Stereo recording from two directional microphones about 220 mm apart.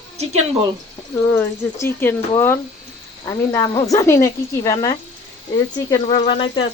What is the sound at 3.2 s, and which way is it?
A woman's voice, 15° left (ahead or behind).